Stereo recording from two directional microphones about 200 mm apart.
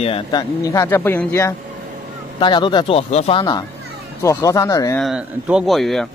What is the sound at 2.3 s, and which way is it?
Speech, 25° left (ahead or behind).